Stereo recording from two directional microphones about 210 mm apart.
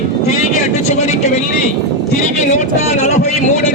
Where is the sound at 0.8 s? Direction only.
30° left (ahead or behind).